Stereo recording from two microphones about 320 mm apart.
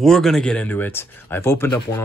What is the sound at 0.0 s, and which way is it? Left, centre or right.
Speech, centre.